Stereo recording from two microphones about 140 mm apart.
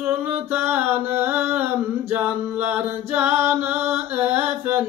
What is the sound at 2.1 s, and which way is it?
Music, 10° right (ahead or behind).